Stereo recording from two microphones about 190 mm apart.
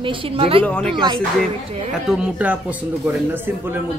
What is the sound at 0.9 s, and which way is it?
Speech, 25° right (ahead or behind).